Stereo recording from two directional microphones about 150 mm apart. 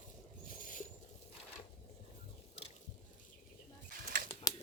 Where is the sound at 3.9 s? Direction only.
70° right (ahead or behind).